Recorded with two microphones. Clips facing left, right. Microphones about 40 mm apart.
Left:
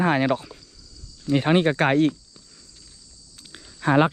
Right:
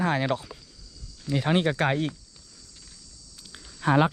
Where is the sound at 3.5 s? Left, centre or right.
Left.